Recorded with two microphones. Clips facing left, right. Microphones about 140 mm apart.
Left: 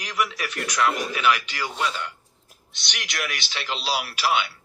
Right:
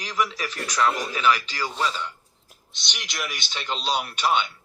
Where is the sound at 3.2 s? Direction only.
Centre (ahead or behind).